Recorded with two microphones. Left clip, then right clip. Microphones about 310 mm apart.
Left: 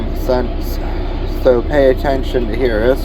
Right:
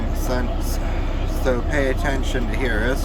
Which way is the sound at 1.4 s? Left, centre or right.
Centre.